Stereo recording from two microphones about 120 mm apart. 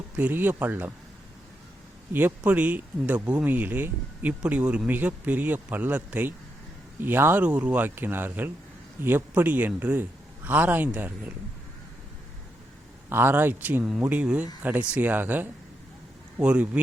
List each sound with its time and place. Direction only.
0.2 s speech: 15° right (ahead or behind)
2.1 s speech: 15° right (ahead or behind)
13.1 s speech: 20° right (ahead or behind)